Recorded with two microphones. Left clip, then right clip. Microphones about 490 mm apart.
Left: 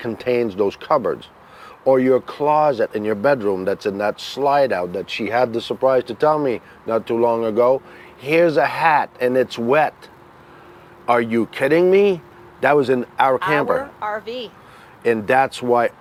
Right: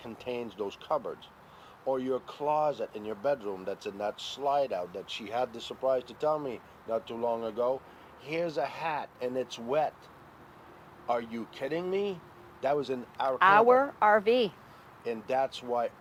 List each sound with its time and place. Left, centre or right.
0.0 s speech: left
11.0 s speech: left
13.4 s a woman's voice: right
15.0 s speech: left